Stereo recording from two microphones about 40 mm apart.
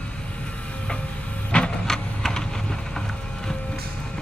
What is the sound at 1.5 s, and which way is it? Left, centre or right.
Vehicle, left.